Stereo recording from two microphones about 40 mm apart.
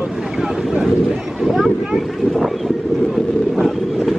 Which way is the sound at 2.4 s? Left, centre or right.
Centre.